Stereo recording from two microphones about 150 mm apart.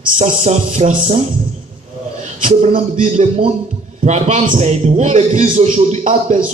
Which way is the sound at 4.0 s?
50° right (ahead or behind).